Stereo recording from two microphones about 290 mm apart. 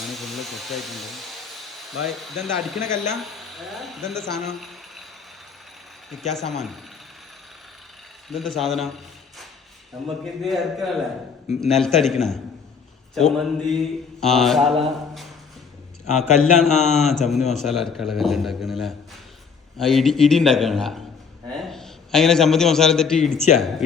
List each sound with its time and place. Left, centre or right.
0.0 s speech: centre
2.8 s a man's voice: left
3.2 s speech: centre
6.1 s a man's voice: centre
8.3 s a man's voice: centre
10.4 s a man's voice: centre
16.0 s a man's voice: left
16.6 s a man's voice: centre
23.3 s a man's voice: left
23.6 s a man's voice: centre